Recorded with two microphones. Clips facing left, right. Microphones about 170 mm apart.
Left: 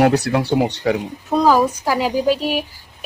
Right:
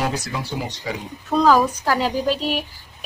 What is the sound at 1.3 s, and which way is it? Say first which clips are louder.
Speech: left 1 dB; 10° left (ahead or behind).